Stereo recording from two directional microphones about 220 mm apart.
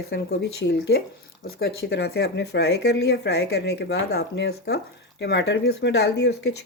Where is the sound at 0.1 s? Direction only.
50° left (ahead or behind).